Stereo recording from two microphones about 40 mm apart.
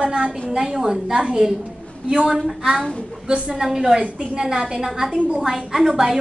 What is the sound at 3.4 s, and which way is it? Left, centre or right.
A woman's voice, centre.